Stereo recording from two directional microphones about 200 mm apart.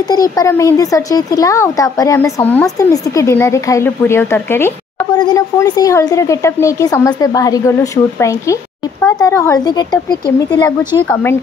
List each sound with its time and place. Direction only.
0.1 s speech: 20° left (ahead or behind)